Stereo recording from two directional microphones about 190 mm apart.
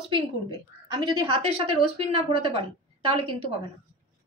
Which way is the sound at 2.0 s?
30° right (ahead or behind).